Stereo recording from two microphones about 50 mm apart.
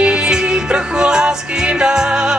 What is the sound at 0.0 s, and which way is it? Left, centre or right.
Music, centre.